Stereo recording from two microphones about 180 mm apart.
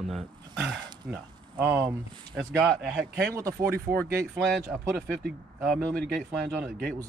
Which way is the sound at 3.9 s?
15° right (ahead or behind).